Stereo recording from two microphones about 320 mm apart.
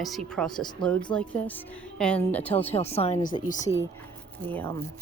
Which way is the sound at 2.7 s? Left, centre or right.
Centre.